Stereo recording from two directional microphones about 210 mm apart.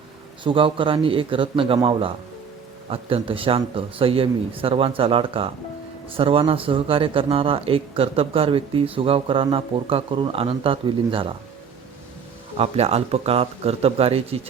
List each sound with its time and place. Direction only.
0.4 s speech: 25° right (ahead or behind)
12.5 s speech: 30° right (ahead or behind)